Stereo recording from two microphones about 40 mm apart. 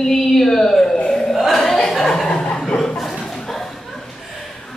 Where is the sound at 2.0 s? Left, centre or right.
Centre.